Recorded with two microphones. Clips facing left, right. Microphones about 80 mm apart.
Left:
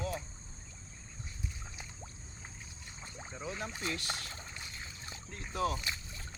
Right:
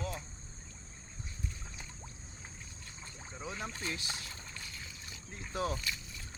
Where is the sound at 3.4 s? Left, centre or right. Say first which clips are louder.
Left 1 dB; centre.